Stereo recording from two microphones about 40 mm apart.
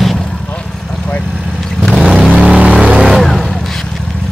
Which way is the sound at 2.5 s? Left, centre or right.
Right.